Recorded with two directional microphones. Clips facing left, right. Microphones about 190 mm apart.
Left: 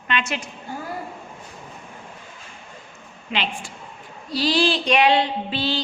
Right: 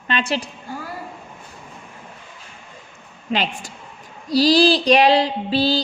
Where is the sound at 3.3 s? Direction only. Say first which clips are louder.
Right 4 dB; 40° right (ahead or behind).